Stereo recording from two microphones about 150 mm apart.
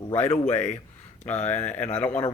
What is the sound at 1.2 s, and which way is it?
Speech, 10° left (ahead or behind).